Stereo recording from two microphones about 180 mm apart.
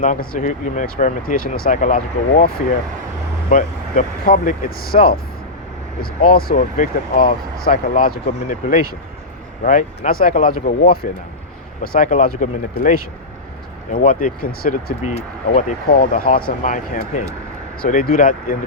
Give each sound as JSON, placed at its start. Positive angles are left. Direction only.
{"t": 0.0, "sound": "speech", "side_deg": 45}